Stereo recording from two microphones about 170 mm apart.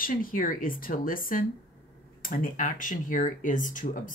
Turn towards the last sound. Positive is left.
turn(degrees=50)  # may be behind; listen again after turning